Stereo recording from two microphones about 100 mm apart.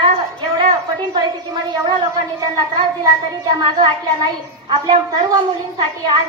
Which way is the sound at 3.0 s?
45° right (ahead or behind).